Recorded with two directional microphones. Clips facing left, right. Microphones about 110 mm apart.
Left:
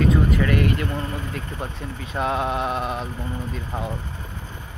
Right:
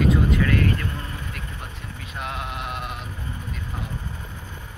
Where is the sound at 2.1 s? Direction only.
30° left (ahead or behind).